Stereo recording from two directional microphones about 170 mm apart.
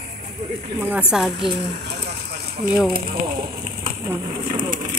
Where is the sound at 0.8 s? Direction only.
10° right (ahead or behind).